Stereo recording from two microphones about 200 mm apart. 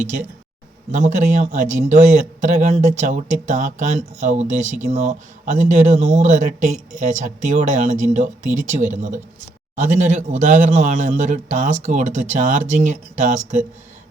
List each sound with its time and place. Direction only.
0.9 s speech: 35° right (ahead or behind)